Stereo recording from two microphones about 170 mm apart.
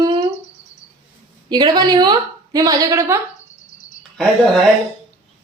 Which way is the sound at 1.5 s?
25° right (ahead or behind).